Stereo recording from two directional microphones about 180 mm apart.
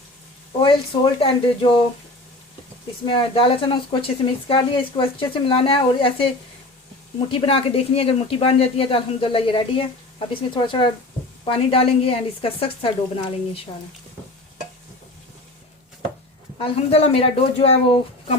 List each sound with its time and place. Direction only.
1.2 s speech: 30° left (ahead or behind)
3.1 s speech: 30° left (ahead or behind)
7.3 s speech: 30° left (ahead or behind)
16.6 s speech: 30° left (ahead or behind)